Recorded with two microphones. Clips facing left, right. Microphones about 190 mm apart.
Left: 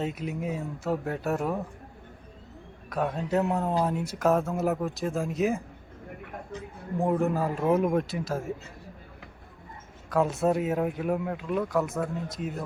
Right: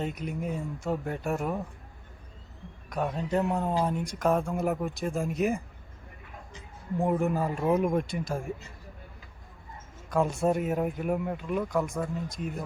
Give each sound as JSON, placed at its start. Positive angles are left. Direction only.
{"t": 0.0, "sound": "speech", "side_deg": 5}
{"t": 2.9, "sound": "speech", "side_deg": 0}
{"t": 6.2, "sound": "a sound", "side_deg": 60}
{"t": 7.0, "sound": "speech", "side_deg": 0}
{"t": 10.1, "sound": "speech", "side_deg": 0}